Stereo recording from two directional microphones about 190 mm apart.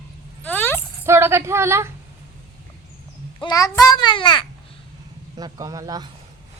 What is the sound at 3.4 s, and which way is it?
A child's voice, 20° left (ahead or behind).